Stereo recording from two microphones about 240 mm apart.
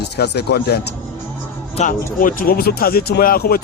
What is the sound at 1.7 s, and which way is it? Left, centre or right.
A man's voice, left.